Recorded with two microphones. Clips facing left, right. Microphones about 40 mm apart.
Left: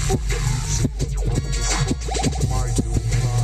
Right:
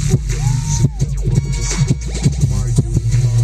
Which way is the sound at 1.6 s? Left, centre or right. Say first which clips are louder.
Right 4 dB; left.